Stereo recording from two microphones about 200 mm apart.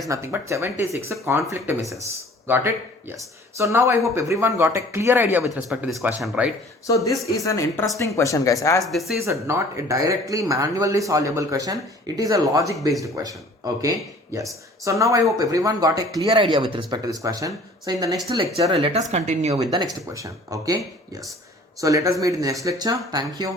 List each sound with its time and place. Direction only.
0.1 s speech: 15° right (ahead or behind)
7.3 s speech: 15° left (ahead or behind)
8.9 s speech: centre (ahead or behind)
9.2 s speech: 15° right (ahead or behind)
14.3 s speech: 15° right (ahead or behind)
19.1 s speech: 35° right (ahead or behind); by 23.5 s 20° right (ahead or behind)